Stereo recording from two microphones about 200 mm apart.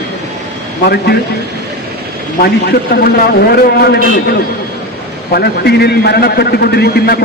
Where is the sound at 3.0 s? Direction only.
50° left (ahead or behind).